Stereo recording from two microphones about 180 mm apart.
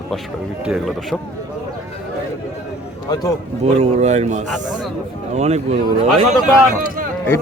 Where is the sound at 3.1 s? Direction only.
20° left (ahead or behind).